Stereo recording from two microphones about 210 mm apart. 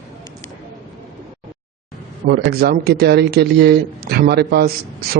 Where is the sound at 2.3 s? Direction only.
50° right (ahead or behind).